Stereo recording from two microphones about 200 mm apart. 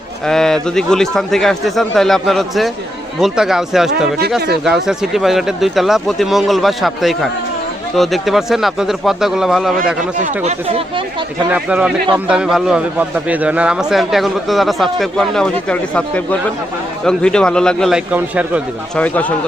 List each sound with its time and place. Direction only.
0.3 s a man's voice: 5° left (ahead or behind)
10.2 s speech: 30° right (ahead or behind)
11.5 s a man's voice: 5° right (ahead or behind)
18.9 s speech: 5° left (ahead or behind)